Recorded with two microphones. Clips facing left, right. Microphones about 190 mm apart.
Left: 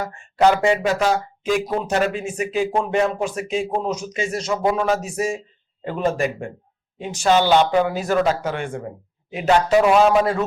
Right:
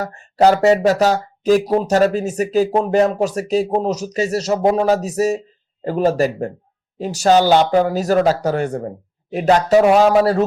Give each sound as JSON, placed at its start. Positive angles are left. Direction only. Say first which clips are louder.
{"t": 0.0, "sound": "speech", "louder": "right 3 dB", "side_deg": -40}